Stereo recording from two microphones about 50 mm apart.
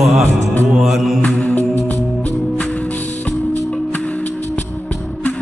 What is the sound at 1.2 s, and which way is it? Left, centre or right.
Music, left.